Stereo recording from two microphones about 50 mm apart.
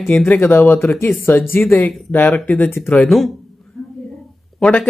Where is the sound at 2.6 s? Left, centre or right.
Left.